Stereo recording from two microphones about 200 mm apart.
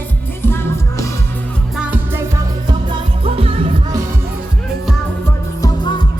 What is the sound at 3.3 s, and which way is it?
Music, 30° right (ahead or behind).